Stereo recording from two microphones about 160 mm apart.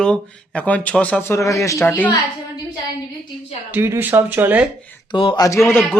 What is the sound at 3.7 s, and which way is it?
Speech, 15° right (ahead or behind).